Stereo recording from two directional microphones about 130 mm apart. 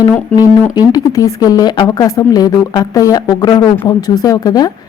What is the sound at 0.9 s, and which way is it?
Speech, 30° left (ahead or behind).